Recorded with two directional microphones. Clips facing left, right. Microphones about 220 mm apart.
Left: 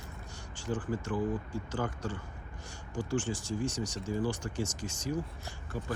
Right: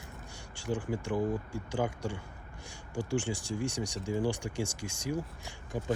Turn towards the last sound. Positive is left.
turn(degrees=-15)  # may be behind; listen again after turning